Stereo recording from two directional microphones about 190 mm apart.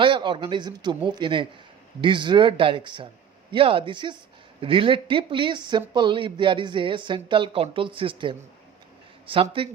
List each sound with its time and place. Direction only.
0.0 s speech: 25° right (ahead or behind)